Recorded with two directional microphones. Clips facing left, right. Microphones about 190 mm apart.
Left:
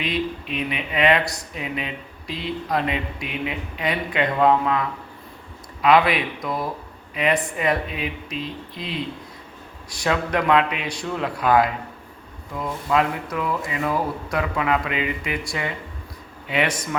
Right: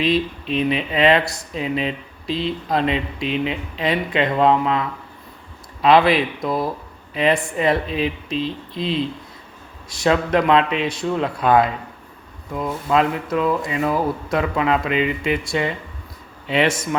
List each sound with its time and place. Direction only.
0.0 s speech: 30° right (ahead or behind)
5.8 s speech: 30° right (ahead or behind)